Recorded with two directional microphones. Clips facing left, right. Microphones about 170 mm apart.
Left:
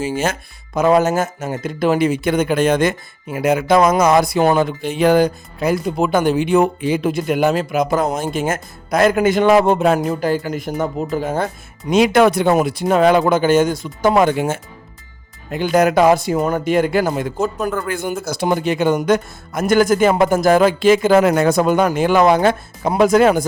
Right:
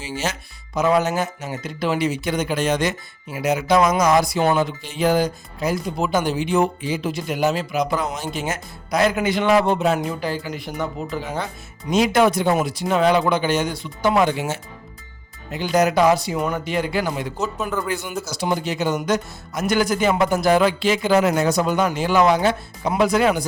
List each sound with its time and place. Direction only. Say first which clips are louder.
0.0 s speech: left 7 dB; 50° left (ahead or behind)
11.9 s speech: left 4 dB; 65° left (ahead or behind); by 23.5 s 45° left (ahead or behind)